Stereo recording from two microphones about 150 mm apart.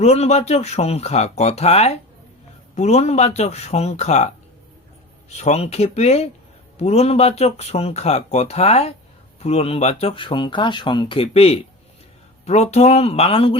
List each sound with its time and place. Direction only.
0.0 s speech: 45° left (ahead or behind)
5.3 s speech: 45° left (ahead or behind)